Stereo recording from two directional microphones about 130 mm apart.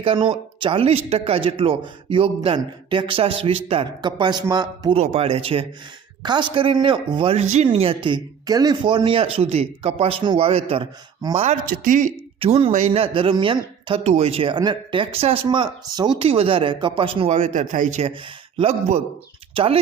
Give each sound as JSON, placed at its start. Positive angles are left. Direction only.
{"t": 0.0, "sound": "speech", "side_deg": -40}
{"t": 4.9, "sound": "speech", "side_deg": -50}
{"t": 7.3, "sound": "speech", "side_deg": -60}
{"t": 7.7, "sound": "speech", "side_deg": -45}
{"t": 11.6, "sound": "speech", "side_deg": -90}
{"t": 12.4, "sound": "speech", "side_deg": -45}
{"t": 16.2, "sound": "speech", "side_deg": -45}
{"t": 18.0, "sound": "speech", "side_deg": -45}